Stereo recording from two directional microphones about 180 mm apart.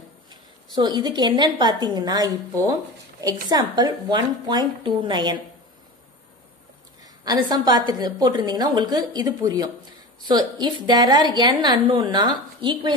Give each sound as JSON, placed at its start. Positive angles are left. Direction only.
{"t": 0.7, "sound": "a woman's voice", "side_deg": -25}
{"t": 7.0, "sound": "a woman's voice", "side_deg": -20}